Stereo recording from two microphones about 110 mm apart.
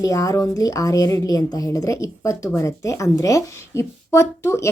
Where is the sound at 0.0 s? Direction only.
30° left (ahead or behind).